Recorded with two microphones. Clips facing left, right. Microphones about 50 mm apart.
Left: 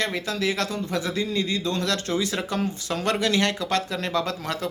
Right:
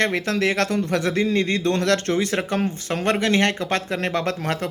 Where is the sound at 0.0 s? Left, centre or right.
Right.